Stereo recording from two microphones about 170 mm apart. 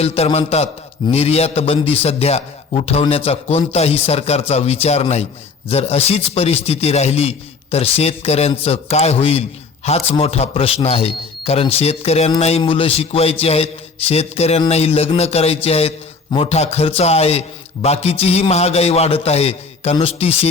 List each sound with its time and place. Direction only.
0.0 s a man's voice: 35° left (ahead or behind)